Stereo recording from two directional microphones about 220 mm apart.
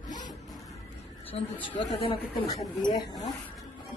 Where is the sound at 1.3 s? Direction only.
20° left (ahead or behind).